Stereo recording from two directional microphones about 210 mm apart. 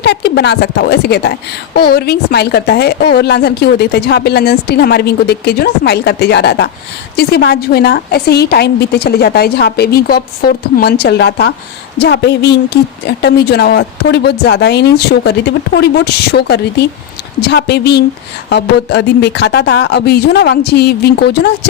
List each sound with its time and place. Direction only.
0.0 s a woman's voice: 50° left (ahead or behind)